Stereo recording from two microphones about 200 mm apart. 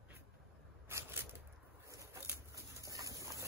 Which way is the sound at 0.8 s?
10° right (ahead or behind).